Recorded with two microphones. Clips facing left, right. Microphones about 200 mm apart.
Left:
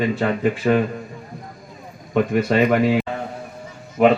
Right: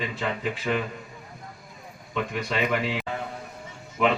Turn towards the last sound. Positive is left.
turn(degrees=45)  # may be behind; listen again after turning